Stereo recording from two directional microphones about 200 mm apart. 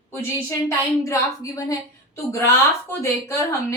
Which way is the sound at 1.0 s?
15° left (ahead or behind).